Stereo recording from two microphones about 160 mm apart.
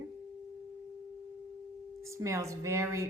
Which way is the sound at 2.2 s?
20° right (ahead or behind).